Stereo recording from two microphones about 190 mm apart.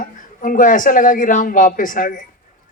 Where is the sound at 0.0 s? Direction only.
45° left (ahead or behind).